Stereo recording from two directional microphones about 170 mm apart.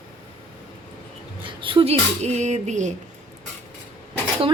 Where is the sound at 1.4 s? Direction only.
30° right (ahead or behind).